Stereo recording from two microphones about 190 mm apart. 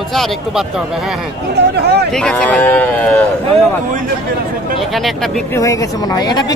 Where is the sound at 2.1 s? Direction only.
5° left (ahead or behind).